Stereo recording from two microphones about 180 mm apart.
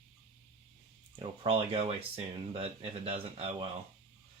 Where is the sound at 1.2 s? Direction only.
30° right (ahead or behind).